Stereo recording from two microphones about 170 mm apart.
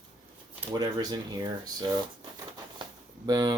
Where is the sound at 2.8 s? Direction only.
20° right (ahead or behind).